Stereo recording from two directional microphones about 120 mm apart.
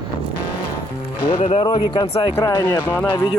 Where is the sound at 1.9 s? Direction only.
35° left (ahead or behind).